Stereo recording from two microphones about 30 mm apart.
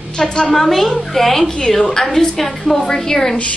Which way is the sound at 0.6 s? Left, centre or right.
Centre.